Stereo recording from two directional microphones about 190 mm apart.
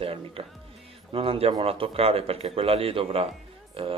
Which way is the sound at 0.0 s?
30° right (ahead or behind).